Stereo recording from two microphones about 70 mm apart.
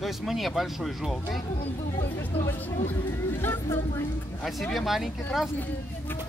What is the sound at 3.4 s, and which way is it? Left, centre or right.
Speech, left.